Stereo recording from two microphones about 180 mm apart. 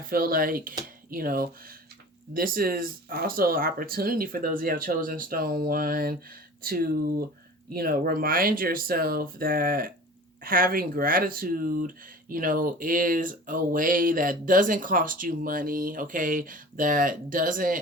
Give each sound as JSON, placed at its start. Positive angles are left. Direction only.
{"t": 0.1, "sound": "speech", "side_deg": -55}